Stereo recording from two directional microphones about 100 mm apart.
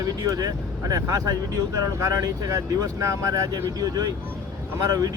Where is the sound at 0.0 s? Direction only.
35° right (ahead or behind).